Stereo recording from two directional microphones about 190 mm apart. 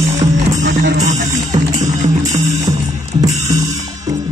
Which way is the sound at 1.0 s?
40° right (ahead or behind).